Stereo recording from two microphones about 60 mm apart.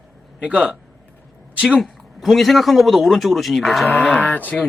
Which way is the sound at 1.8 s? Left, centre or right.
Centre.